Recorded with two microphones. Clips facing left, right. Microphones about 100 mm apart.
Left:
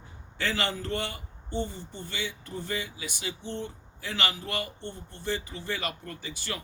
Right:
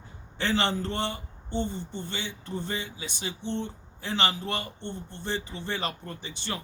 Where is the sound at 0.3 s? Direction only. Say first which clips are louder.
Right 4 dB; 25° right (ahead or behind).